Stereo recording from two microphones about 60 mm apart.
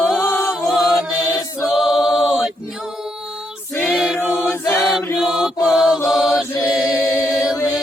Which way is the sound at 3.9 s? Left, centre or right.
Centre.